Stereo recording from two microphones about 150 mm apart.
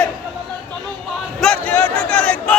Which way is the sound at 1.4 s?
10° left (ahead or behind).